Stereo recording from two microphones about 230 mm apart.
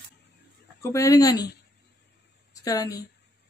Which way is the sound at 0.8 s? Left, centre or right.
Centre.